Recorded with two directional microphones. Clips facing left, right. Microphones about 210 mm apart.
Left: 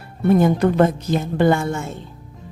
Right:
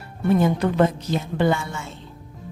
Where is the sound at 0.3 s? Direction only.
50° left (ahead or behind).